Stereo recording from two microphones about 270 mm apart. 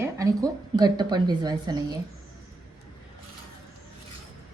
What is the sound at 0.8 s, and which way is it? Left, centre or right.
A woman's voice, centre.